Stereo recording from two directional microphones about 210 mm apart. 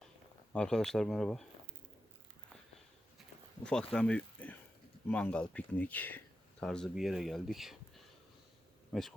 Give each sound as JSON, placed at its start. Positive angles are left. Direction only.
{"t": 0.5, "sound": "speech", "side_deg": 5}
{"t": 3.6, "sound": "speech", "side_deg": 5}